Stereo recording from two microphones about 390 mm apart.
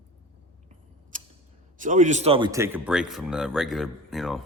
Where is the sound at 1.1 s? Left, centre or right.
Centre.